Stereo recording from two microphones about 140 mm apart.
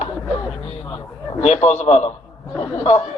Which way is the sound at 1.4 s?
55° left (ahead or behind).